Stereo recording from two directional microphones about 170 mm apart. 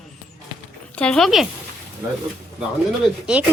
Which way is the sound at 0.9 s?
5° left (ahead or behind).